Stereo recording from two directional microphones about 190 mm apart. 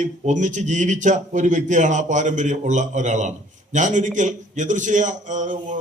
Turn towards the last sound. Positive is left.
turn(degrees=-40)  # may be behind; listen again after turning